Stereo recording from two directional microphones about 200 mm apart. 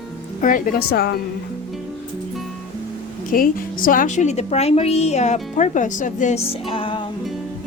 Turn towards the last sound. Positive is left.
turn(degrees=25)  # may be behind; listen again after turning